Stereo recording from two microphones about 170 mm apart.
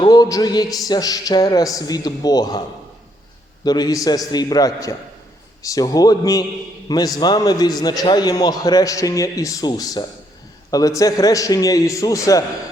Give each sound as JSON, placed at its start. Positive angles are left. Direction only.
{"t": 0.0, "sound": "a man's voice", "side_deg": 20}